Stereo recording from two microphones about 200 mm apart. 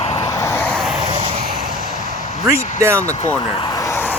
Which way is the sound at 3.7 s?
15° left (ahead or behind).